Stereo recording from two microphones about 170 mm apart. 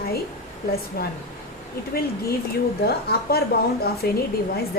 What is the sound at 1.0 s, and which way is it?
Speech, 65° left (ahead or behind).